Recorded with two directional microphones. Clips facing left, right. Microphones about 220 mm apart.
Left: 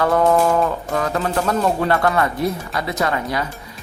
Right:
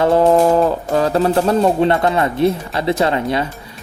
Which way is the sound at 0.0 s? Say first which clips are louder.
Right 4 dB; 30° right (ahead or behind).